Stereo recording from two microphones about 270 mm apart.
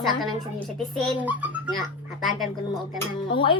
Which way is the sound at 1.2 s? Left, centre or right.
Centre.